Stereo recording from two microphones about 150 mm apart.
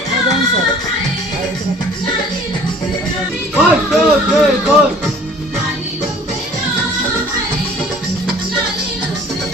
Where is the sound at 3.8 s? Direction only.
5° right (ahead or behind).